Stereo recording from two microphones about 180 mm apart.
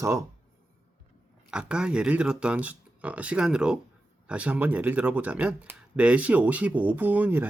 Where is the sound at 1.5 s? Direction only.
5° right (ahead or behind).